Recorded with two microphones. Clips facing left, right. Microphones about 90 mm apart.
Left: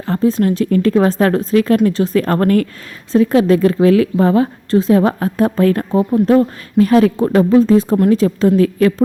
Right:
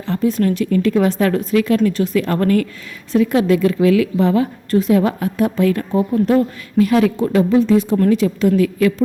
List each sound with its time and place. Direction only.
0.1 s a woman's voice: 35° left (ahead or behind)